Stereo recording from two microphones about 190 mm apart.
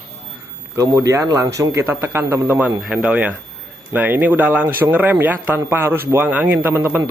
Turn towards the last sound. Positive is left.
turn(degrees=-10)  # may be behind; listen again after turning